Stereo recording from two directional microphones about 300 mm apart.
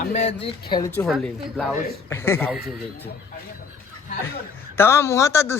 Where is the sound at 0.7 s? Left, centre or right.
Centre.